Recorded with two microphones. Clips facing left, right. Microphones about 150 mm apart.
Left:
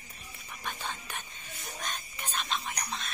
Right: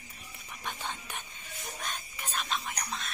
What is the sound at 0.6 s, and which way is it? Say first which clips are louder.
Whispering: even; 15° right (ahead or behind).